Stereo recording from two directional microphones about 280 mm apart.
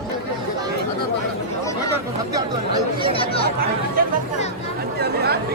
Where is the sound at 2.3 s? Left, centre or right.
Centre.